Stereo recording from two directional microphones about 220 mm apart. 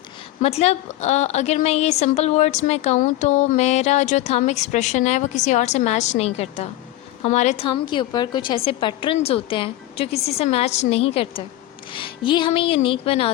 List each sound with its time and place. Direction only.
0.4 s a woman's voice: 30° left (ahead or behind)